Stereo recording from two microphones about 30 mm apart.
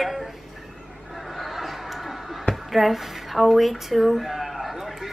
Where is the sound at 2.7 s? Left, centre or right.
Centre.